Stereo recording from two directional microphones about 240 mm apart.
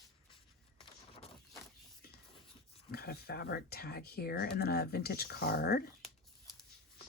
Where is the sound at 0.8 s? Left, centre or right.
Left.